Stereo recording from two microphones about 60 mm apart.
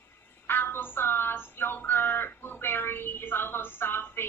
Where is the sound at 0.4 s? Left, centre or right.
Left.